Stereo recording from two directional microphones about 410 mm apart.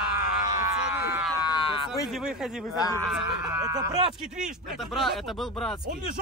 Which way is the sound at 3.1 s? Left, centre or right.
Centre.